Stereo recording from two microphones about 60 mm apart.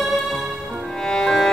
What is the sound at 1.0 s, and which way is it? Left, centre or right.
Music, centre.